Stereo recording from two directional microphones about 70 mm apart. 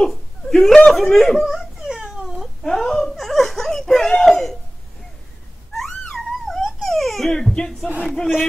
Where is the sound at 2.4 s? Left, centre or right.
Centre.